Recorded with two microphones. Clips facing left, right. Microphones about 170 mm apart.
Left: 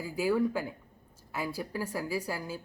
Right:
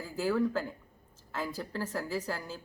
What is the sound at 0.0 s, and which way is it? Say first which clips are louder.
Speech: left 2 dB; 10° left (ahead or behind).